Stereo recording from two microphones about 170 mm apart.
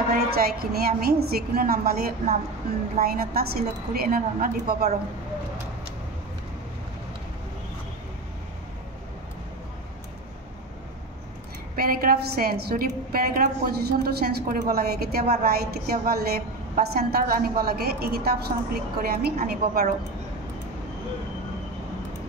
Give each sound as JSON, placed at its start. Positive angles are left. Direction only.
{"t": 0.1, "sound": "a woman's voice", "side_deg": -65}
{"t": 11.7, "sound": "a woman's voice", "side_deg": -60}